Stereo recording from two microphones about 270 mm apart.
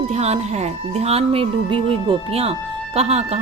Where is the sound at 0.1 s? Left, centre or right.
Right.